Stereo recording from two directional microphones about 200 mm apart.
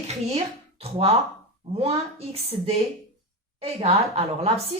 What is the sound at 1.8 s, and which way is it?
A woman's voice, 30° right (ahead or behind).